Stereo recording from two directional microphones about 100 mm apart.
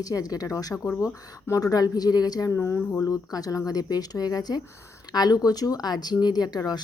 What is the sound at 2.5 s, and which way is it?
A woman's voice, 25° left (ahead or behind).